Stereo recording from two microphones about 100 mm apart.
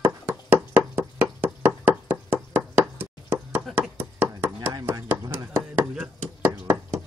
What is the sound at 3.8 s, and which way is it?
Chopping, 20° right (ahead or behind).